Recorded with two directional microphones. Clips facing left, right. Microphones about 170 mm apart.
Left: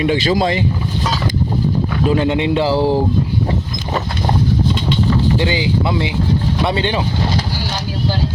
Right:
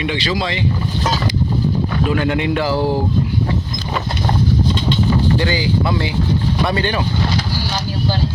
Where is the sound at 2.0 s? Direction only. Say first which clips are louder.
Left 4 dB; 25° left (ahead or behind).